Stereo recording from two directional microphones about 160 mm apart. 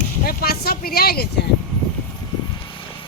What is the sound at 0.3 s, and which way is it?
Speech, 75° left (ahead or behind).